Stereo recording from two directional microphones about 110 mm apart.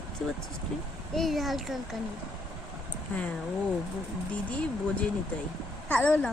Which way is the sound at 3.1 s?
15° left (ahead or behind).